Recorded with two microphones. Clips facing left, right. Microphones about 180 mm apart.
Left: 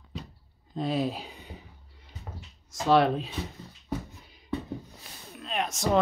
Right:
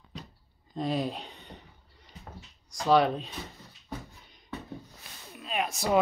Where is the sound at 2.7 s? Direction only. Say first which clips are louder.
Left 1 dB; centre (ahead or behind).